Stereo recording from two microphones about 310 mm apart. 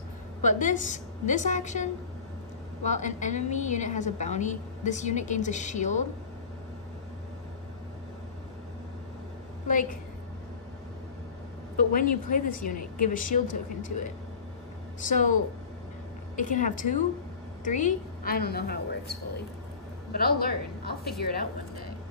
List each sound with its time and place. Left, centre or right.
0.4 s a woman's voice: left
11.9 s a woman's voice: left
15.0 s a woman's voice: left
16.3 s a woman's voice: left